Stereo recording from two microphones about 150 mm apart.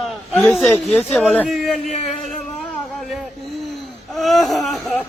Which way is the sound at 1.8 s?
55° left (ahead or behind).